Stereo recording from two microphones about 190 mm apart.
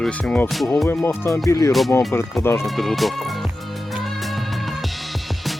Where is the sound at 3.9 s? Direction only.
Centre (ahead or behind).